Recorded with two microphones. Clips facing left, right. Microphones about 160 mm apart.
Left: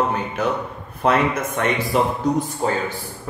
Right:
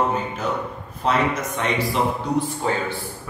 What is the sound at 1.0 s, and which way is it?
A man's voice, 55° left (ahead or behind).